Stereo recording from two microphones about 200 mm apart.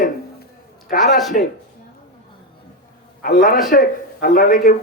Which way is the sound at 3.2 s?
45° left (ahead or behind).